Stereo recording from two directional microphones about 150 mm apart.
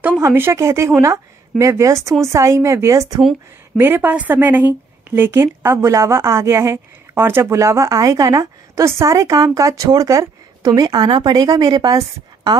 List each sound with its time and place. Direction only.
0.2 s a woman's voice: 15° right (ahead or behind)